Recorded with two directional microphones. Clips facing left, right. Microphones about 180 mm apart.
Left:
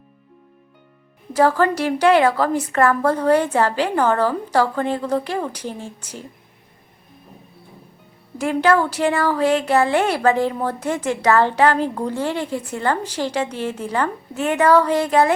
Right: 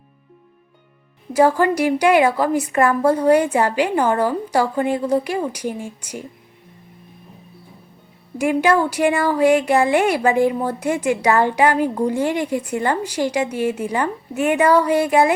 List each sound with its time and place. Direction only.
1.3 s speech: 10° right (ahead or behind)
8.4 s speech: 15° right (ahead or behind)